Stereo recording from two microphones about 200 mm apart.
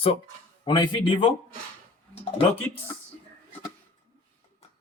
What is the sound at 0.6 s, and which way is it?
Speech, 25° left (ahead or behind).